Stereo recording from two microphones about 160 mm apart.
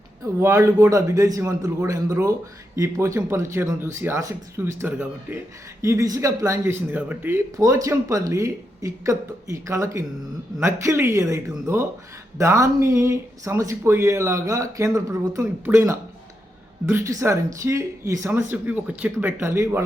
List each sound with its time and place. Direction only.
0.3 s speech: 15° right (ahead or behind)